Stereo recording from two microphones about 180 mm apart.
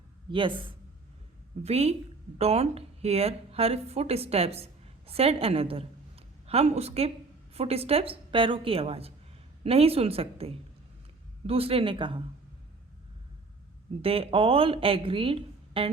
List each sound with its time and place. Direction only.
0.3 s a woman's voice: 30° right (ahead or behind)
14.0 s a woman's voice: 30° right (ahead or behind)